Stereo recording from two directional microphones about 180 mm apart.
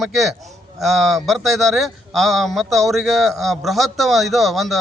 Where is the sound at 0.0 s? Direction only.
Centre (ahead or behind).